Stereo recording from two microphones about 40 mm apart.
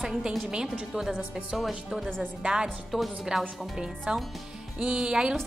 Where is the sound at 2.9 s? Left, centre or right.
Centre.